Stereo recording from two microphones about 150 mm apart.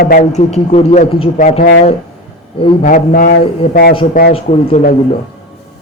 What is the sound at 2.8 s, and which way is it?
Speech, 70° left (ahead or behind).